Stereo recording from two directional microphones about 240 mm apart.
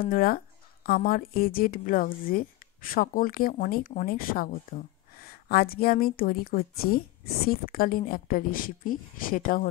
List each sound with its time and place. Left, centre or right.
0.0 s a woman's voice: left